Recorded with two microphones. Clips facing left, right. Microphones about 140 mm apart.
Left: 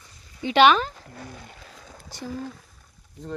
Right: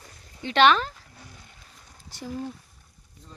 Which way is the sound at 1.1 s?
70° left (ahead or behind).